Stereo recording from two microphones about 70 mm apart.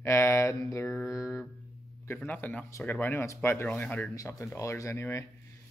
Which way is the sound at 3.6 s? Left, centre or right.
Left.